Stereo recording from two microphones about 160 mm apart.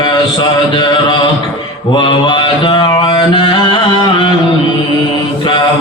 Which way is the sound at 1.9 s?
30° left (ahead or behind).